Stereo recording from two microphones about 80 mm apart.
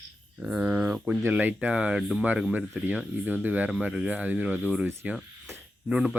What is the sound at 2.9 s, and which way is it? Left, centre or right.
Speech, right.